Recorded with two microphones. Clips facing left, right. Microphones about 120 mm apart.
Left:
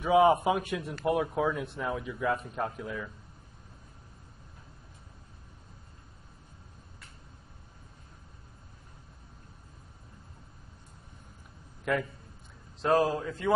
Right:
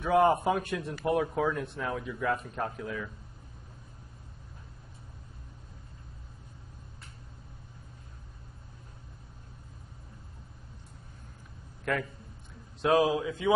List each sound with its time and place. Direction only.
0.0 s speech: centre (ahead or behind)
11.8 s a man's voice: 5° left (ahead or behind)